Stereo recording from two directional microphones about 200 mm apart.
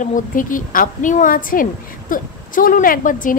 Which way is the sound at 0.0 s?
40° left (ahead or behind).